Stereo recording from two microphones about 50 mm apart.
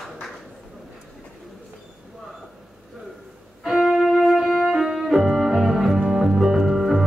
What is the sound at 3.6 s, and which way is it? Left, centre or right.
Music, centre.